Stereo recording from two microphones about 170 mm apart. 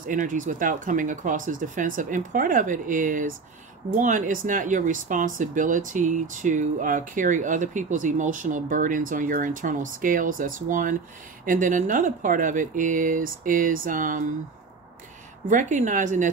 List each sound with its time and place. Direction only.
0.0 s speech: 50° right (ahead or behind)
15.4 s speech: 45° right (ahead or behind)